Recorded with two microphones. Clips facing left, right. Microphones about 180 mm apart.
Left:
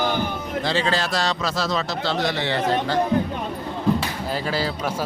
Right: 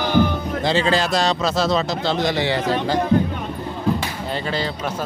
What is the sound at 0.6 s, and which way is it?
A man's voice, 20° right (ahead or behind).